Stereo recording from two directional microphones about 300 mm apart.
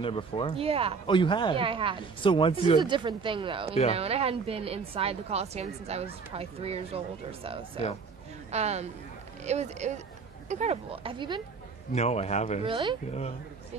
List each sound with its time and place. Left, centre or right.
0.0 s speech: centre
0.6 s a woman's voice: centre
1.0 s speech: centre
1.6 s speech: centre
2.2 s speech: centre
2.8 s a woman's voice: centre
11.9 s a man's voice: left
12.6 s speech: centre